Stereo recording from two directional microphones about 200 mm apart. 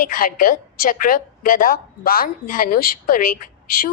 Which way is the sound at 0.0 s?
45° left (ahead or behind).